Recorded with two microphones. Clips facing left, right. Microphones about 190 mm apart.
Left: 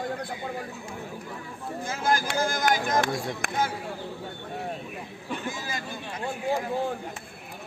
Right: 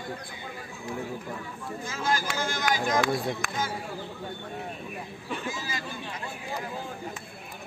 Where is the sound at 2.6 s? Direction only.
50° left (ahead or behind).